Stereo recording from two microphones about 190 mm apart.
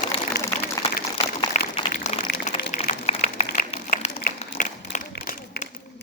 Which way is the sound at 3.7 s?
35° left (ahead or behind).